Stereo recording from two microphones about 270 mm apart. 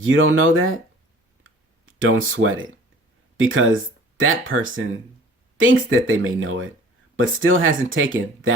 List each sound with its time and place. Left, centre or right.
0.0 s speech: right
1.5 s clicking: right
3.3 s speech: right